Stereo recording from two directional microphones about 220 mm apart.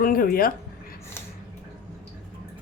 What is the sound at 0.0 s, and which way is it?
Speech, 40° left (ahead or behind).